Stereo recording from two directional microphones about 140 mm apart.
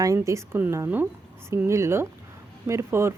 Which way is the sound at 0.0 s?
20° right (ahead or behind).